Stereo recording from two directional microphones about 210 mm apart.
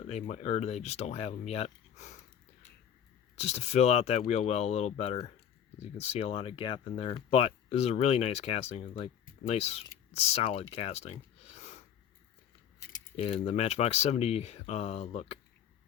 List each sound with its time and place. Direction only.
0.1 s speech: 30° left (ahead or behind)
3.3 s speech: 30° left (ahead or behind)
13.1 s speech: 30° left (ahead or behind)